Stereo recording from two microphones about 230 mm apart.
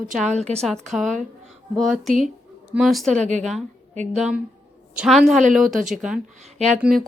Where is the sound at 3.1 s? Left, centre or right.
Right.